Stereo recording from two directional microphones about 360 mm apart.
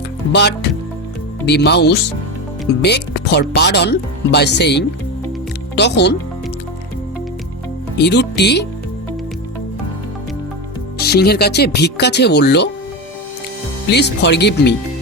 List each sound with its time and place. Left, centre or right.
0.3 s speech: left
7.9 s speech: left
11.0 s speech: left
13.9 s speech: left